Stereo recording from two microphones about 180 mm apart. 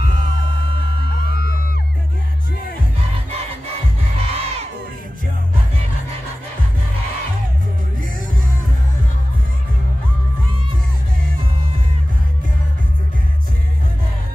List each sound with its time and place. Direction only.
4.2 s crowd: 35° right (ahead or behind)